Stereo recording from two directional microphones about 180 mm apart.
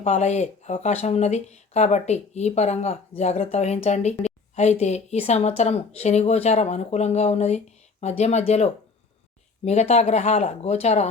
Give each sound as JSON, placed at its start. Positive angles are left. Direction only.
{"t": 0.0, "sound": "speech", "side_deg": 40}